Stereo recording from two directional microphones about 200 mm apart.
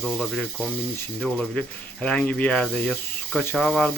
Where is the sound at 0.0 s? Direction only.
5° left (ahead or behind).